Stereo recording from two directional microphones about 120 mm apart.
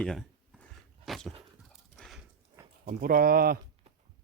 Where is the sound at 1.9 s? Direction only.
Centre (ahead or behind).